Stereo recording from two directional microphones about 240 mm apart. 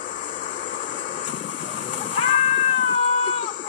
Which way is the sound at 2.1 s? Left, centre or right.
Left.